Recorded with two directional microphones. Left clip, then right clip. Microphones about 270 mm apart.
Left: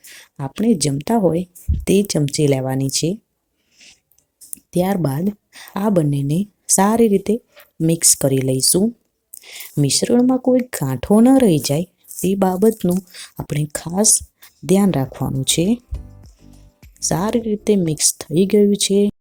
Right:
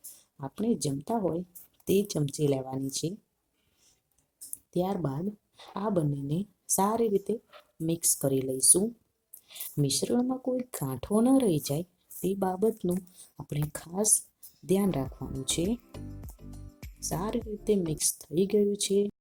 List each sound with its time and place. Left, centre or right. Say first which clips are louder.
0.1 s speech: left 12 dB; left
4.7 s speech: left 11 dB; left
17.0 s speech: left 13 dB; left